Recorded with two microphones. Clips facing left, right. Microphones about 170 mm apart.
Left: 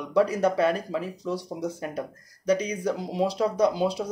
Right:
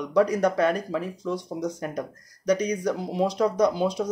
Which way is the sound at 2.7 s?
5° left (ahead or behind).